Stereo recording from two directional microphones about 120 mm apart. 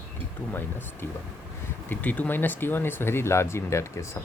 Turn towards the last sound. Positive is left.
turn(degrees=20)  # may be behind; listen again after turning